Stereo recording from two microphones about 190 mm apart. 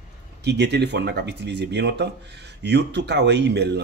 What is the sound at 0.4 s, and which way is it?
Speech, 60° right (ahead or behind).